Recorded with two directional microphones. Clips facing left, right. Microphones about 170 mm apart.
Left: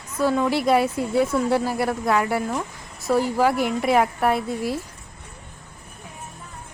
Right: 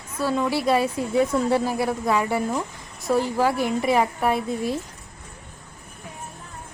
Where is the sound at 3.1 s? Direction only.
10° left (ahead or behind).